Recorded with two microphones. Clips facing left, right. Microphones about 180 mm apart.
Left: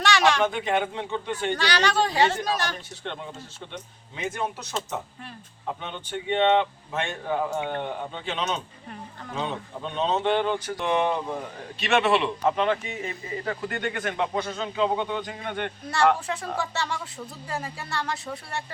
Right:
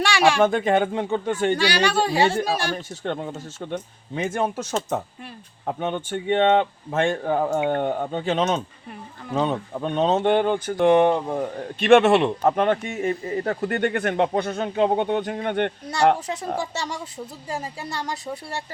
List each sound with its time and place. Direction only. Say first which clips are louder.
0.0 s a sound: right 3 dB; 10° right (ahead or behind)
0.4 s speech: right 6 dB; 45° right (ahead or behind)
1.5 s speech: right 3 dB; 10° right (ahead or behind)
3.0 s speech: right 7 dB; 45° right (ahead or behind)
17.5 s speech: right 2 dB; 20° right (ahead or behind)